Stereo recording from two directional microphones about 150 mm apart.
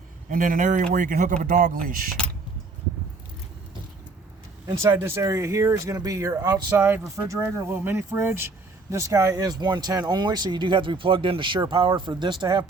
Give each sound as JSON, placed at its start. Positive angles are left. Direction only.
{"t": 0.3, "sound": "speech", "side_deg": -60}
{"t": 4.7, "sound": "speech", "side_deg": -20}